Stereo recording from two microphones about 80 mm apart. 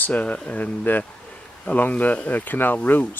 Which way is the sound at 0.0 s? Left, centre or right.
Centre.